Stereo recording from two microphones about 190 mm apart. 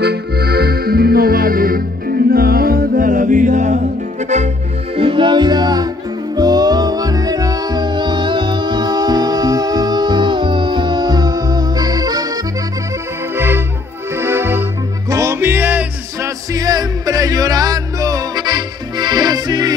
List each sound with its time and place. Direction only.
0.0 s music: 55° right (ahead or behind); by 3.8 s 40° right (ahead or behind)
4.9 s music: 25° right (ahead or behind)
14.1 s music: 15° right (ahead or behind)
16.5 s music: 20° right (ahead or behind)